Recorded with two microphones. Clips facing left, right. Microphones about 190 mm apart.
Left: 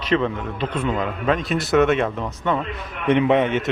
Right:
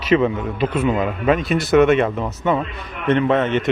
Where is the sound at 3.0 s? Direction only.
15° left (ahead or behind).